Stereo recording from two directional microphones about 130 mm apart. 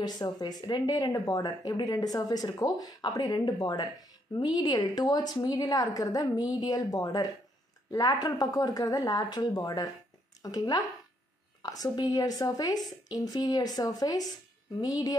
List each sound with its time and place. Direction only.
0.0 s a woman's voice: 30° left (ahead or behind)